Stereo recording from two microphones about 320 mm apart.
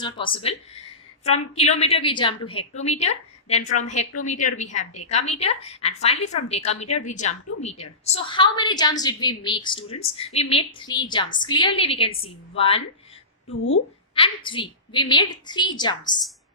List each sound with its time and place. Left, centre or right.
1.2 s a woman's voice: centre
13.5 s speech: left
14.2 s a woman's voice: centre